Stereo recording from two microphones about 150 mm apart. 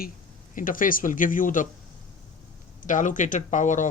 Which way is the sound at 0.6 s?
65° left (ahead or behind).